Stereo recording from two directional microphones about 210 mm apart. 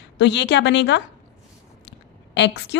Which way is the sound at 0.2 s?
55° left (ahead or behind).